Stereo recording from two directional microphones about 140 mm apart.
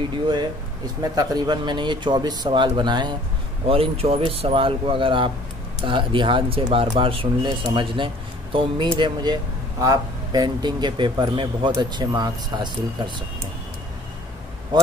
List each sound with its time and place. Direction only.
1.1 s speech: 30° right (ahead or behind)
3.6 s speech: 40° right (ahead or behind)